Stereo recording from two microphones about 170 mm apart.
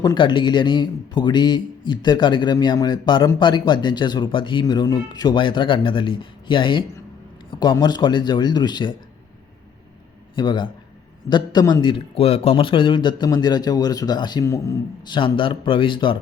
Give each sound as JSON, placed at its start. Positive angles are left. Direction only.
{"t": 0.0, "sound": "speech", "side_deg": 25}
{"t": 10.3, "sound": "speech", "side_deg": 25}